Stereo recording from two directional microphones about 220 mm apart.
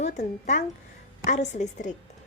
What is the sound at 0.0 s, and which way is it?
Speech, 30° left (ahead or behind).